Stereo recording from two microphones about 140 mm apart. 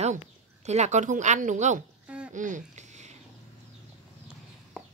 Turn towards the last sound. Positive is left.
turn(degrees=-55)  # may be behind; listen again after turning